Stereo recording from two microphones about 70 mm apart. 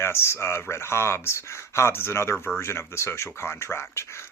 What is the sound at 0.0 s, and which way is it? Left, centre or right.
Speech, left.